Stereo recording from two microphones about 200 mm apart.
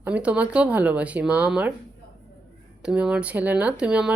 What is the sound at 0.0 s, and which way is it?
Speech, 5° right (ahead or behind).